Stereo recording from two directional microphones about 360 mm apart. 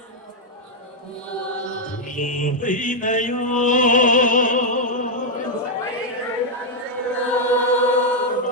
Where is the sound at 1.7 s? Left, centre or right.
Left.